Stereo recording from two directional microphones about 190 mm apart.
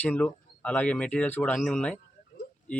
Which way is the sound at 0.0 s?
5° left (ahead or behind).